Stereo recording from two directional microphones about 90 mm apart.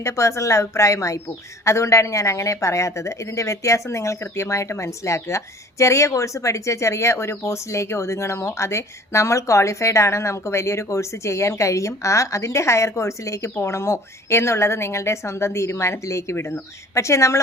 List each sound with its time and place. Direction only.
0.0 s speech: 35° left (ahead or behind)